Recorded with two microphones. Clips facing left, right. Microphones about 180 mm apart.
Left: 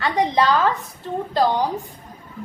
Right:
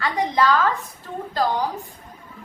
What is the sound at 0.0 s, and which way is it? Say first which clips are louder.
Speech: left 2 dB; 20° left (ahead or behind).